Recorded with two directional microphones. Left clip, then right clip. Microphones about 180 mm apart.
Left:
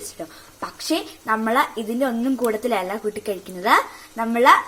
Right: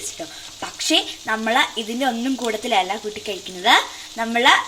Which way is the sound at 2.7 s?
5° right (ahead or behind).